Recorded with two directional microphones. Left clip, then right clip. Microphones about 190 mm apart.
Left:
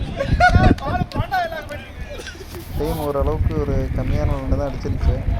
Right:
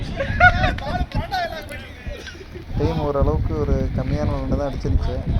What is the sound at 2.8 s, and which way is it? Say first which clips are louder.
Speech: even; centre (ahead or behind).